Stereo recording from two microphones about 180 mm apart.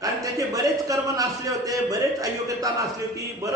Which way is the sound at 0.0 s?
20° right (ahead or behind).